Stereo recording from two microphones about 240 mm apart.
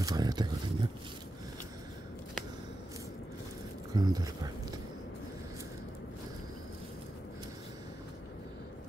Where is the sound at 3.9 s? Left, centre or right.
Centre.